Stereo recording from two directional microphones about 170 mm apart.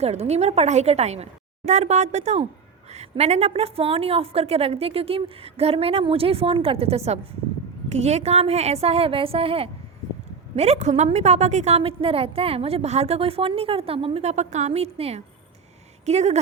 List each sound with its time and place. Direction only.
0.0 s a woman's voice: 40° right (ahead or behind)